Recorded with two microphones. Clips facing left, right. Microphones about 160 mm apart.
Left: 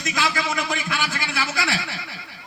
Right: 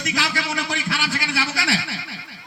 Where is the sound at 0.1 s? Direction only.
35° right (ahead or behind).